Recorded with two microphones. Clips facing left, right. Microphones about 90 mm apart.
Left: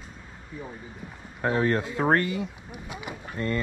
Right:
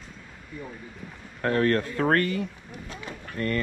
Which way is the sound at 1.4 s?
15° left (ahead or behind).